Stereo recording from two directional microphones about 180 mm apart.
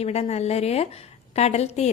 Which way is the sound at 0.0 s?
35° left (ahead or behind).